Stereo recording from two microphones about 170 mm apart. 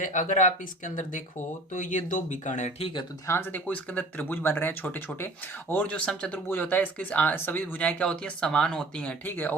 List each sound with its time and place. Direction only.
0.0 s speech: 50° left (ahead or behind)
3.2 s speech: 10° left (ahead or behind)